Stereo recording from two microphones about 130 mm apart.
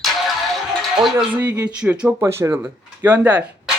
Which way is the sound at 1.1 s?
15° right (ahead or behind).